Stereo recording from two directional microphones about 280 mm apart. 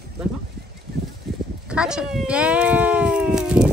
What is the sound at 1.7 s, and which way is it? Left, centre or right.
Cat, centre.